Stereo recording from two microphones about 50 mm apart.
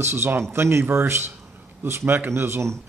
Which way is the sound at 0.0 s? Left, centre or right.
Right.